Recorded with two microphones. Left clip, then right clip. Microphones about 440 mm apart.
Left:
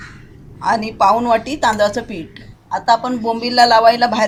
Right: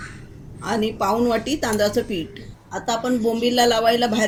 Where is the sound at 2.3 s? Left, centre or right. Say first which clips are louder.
Left 9 dB; centre.